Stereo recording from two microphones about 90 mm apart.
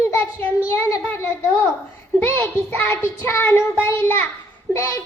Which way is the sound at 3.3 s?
25° left (ahead or behind).